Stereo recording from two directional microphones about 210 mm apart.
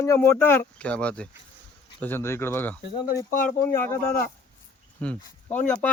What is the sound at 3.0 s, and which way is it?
Speech, 40° left (ahead or behind).